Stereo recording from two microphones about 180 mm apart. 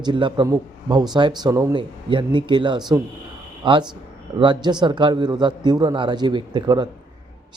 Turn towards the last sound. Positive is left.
turn(degrees=-25)  # may be behind; listen again after turning